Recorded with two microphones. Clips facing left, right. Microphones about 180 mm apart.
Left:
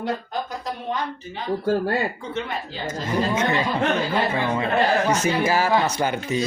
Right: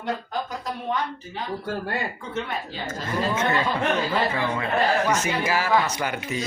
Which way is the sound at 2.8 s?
15° left (ahead or behind).